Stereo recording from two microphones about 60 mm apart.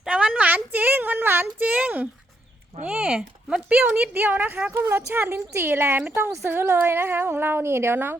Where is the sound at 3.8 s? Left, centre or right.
Right.